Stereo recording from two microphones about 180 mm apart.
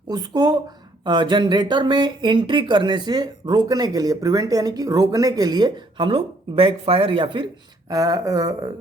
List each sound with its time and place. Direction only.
0.1 s speech: 20° right (ahead or behind)